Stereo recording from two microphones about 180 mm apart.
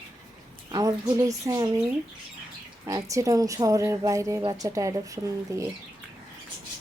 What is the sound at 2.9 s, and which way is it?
Speech, 15° right (ahead or behind).